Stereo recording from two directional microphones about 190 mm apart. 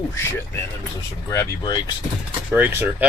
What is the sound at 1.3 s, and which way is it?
Speech, 20° left (ahead or behind).